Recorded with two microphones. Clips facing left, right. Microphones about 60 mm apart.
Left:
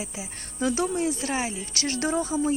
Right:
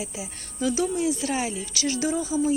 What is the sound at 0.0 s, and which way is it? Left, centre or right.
Speech, left.